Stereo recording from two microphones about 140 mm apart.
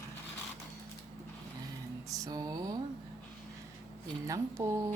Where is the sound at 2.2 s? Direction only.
25° right (ahead or behind).